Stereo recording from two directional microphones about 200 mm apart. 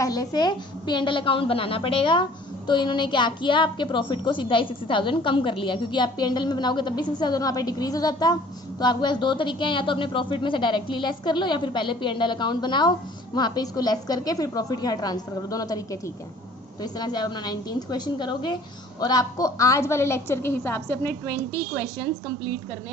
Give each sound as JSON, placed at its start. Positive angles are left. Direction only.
{"t": 0.0, "sound": "a woman's voice", "side_deg": 20}